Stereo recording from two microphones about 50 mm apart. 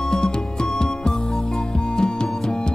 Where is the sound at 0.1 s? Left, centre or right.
Centre.